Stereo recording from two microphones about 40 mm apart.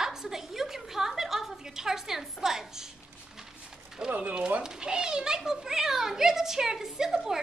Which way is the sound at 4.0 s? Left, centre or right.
Centre.